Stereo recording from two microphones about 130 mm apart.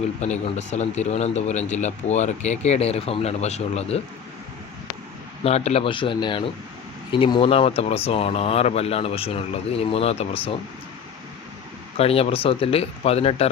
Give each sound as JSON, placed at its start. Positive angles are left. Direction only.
{"t": 0.2, "sound": "a man's voice", "side_deg": 60}
{"t": 5.4, "sound": "speech", "side_deg": 55}
{"t": 11.9, "sound": "speech", "side_deg": 50}